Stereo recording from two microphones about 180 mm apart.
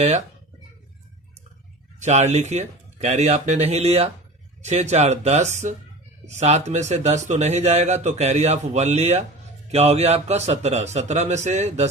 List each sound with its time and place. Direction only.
2.0 s speech: 40° right (ahead or behind)